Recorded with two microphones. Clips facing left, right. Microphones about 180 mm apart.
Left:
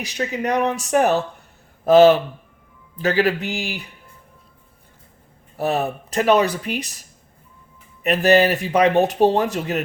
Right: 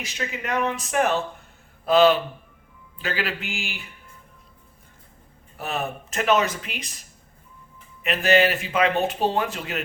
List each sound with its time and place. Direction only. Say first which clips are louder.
0.0 s speech: left 7 dB; 40° left (ahead or behind)
5.5 s speech: left 7 dB; 35° left (ahead or behind)
8.0 s speech: left 4 dB; 40° left (ahead or behind)